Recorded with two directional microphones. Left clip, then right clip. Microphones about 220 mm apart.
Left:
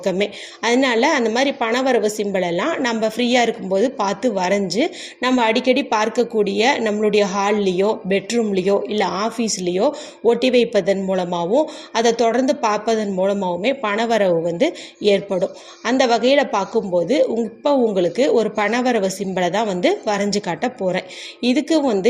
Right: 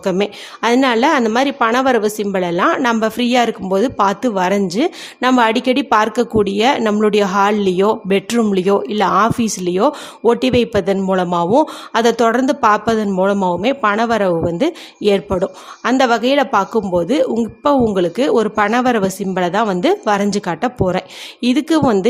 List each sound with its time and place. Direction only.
0.0 s a woman's voice: 20° right (ahead or behind)